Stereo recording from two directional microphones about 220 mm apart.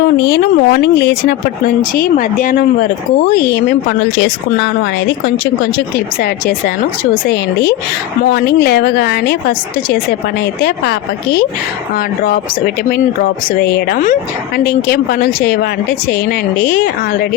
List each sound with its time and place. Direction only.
0.3 s speech: 50° left (ahead or behind)
2.0 s speech: 35° left (ahead or behind)
3.5 s speech: 50° left (ahead or behind)
7.1 s speech: 45° left (ahead or behind)
10.6 s speech: 45° left (ahead or behind)
12.2 s speech: 45° left (ahead or behind)